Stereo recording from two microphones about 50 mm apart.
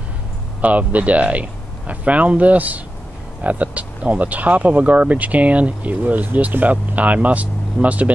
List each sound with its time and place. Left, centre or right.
0.6 s speech: right